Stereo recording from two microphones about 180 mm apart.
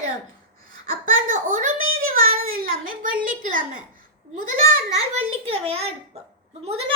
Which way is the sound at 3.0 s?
45° right (ahead or behind).